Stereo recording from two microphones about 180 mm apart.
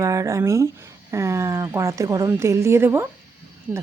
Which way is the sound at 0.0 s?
15° right (ahead or behind).